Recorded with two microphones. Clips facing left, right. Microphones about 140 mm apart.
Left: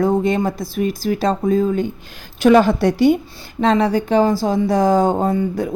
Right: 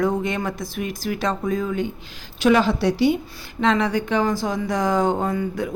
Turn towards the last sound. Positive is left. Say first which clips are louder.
# left 5 dB
turn(degrees=35)  # may be behind; listen again after turning